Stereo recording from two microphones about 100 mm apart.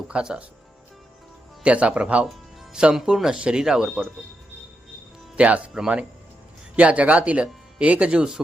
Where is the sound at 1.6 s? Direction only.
10° right (ahead or behind).